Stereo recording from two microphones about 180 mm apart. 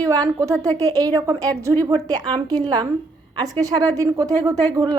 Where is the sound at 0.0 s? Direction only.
20° right (ahead or behind).